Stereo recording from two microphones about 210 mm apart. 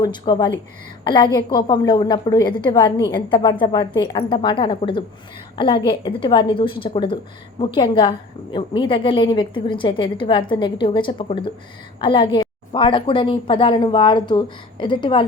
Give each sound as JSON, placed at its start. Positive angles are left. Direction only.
{"t": 0.0, "sound": "a woman's voice", "side_deg": 20}